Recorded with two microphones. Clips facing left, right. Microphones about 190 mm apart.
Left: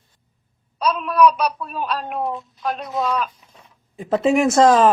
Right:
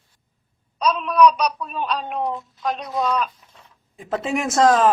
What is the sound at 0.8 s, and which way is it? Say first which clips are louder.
A woman's voice: even; 5° left (ahead or behind).